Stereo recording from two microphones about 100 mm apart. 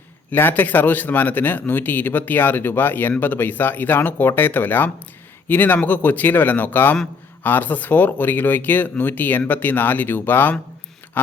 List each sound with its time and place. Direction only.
0.3 s speech: 20° left (ahead or behind)